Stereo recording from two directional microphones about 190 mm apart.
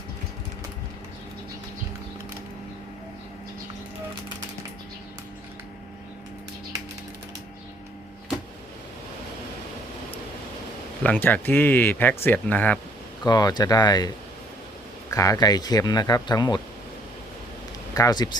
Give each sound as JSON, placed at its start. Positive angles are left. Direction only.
{"t": 11.0, "sound": "speech", "side_deg": 10}
{"t": 13.2, "sound": "speech", "side_deg": 20}
{"t": 15.1, "sound": "speech", "side_deg": 15}
{"t": 17.9, "sound": "speech", "side_deg": 20}